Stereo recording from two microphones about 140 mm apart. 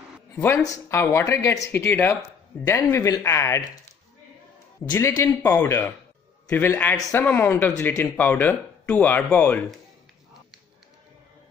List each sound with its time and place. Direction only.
0.8 s speech: 20° left (ahead or behind)
4.9 s speech: 20° left (ahead or behind)